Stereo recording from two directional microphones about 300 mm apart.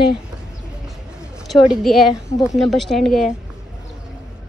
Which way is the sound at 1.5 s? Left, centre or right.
Centre.